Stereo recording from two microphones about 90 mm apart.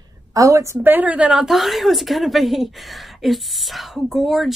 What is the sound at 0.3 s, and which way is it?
Speech, 40° right (ahead or behind).